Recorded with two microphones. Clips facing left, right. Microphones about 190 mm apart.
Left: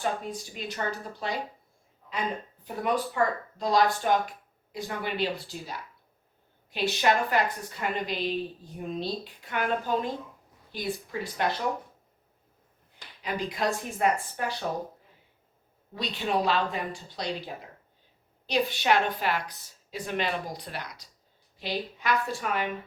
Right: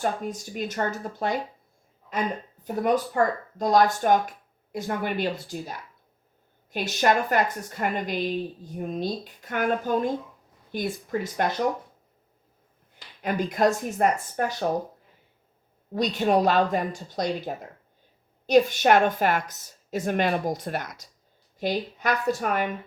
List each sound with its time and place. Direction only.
0.0 s a woman's voice: 45° right (ahead or behind)
2.6 s a woman's voice: 45° right (ahead or behind)
13.2 s a woman's voice: 45° right (ahead or behind)
15.9 s a woman's voice: 45° right (ahead or behind)